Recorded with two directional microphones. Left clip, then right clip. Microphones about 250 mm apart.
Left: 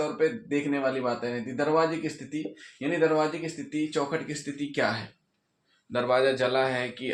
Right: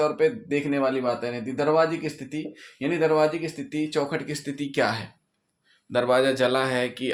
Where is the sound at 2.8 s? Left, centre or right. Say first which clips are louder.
Right 3 dB; right.